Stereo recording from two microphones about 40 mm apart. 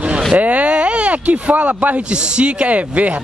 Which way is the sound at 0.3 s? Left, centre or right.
Right.